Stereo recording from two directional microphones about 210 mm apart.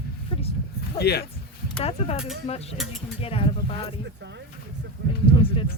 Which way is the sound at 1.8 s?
30° left (ahead or behind).